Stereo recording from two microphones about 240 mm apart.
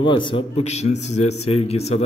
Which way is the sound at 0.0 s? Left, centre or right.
Centre.